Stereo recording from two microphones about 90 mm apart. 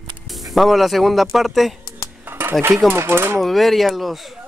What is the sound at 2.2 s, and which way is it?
Dishes, 25° right (ahead or behind).